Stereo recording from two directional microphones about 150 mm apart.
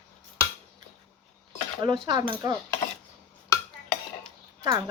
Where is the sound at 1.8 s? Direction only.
30° right (ahead or behind).